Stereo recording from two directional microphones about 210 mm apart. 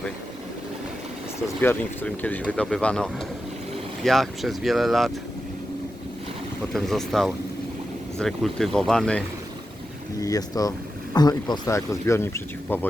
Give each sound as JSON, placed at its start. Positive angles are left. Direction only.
{"t": 1.6, "sound": "speech", "side_deg": 10}
{"t": 6.7, "sound": "speech", "side_deg": 0}
{"t": 10.2, "sound": "speech", "side_deg": 15}